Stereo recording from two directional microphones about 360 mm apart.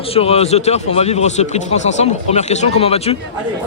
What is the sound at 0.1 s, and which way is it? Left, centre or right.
Speech, centre.